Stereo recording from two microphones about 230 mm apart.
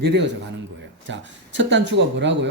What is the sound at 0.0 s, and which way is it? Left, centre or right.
Speech, right.